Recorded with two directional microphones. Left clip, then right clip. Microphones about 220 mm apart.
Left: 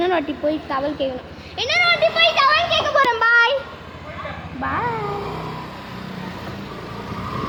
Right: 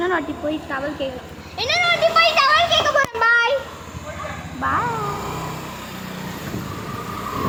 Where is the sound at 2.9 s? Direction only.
20° left (ahead or behind).